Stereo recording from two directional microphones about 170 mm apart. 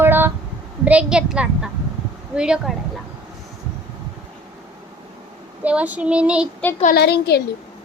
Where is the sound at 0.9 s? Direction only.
5° right (ahead or behind).